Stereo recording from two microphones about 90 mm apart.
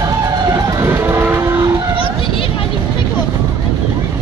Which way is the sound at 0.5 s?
40° right (ahead or behind).